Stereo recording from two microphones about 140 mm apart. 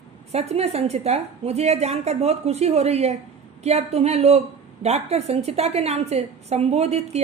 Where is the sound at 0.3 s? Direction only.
50° right (ahead or behind).